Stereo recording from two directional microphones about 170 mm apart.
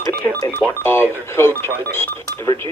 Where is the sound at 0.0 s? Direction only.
15° left (ahead or behind).